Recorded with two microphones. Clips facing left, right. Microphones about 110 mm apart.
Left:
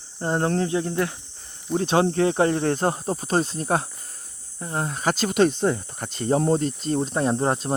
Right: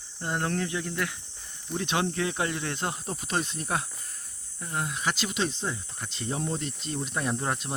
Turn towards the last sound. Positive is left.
turn(degrees=35)  # may be behind; listen again after turning